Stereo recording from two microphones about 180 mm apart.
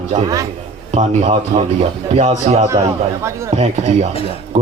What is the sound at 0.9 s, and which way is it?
A man's voice, 40° right (ahead or behind).